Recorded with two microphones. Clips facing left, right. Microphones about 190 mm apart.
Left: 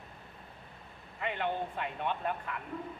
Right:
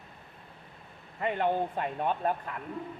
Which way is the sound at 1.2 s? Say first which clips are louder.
Right 6 dB; 40° right (ahead or behind).